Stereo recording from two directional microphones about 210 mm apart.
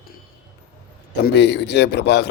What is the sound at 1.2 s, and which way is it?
Speech, 55° left (ahead or behind).